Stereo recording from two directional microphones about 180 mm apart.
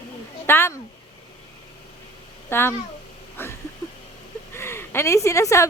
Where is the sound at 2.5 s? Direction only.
15° left (ahead or behind).